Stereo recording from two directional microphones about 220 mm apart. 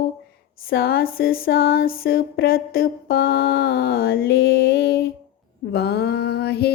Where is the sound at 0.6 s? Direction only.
45° left (ahead or behind).